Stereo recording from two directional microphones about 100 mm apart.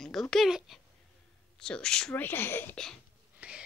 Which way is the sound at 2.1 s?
20° left (ahead or behind).